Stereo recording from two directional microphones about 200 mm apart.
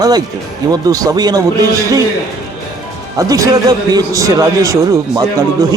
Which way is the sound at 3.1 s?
15° right (ahead or behind).